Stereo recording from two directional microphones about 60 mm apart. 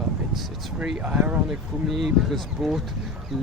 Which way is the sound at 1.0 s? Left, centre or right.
Right.